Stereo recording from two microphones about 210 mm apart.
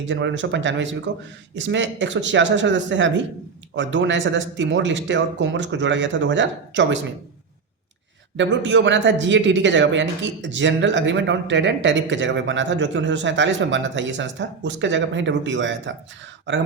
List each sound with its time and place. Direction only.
0.0 s a man's voice: 60° right (ahead or behind)
8.4 s a man's voice: 60° right (ahead or behind)